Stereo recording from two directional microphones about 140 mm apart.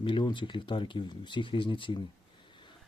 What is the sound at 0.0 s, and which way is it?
Speech, 35° left (ahead or behind).